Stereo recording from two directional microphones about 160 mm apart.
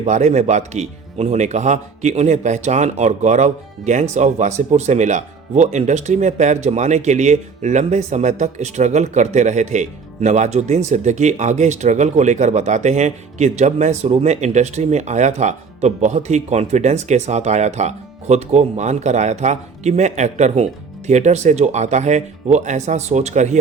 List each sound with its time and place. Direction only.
0.0 s speech: 45° right (ahead or behind)